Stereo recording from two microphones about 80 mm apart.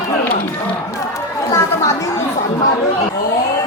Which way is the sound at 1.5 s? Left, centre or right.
Left.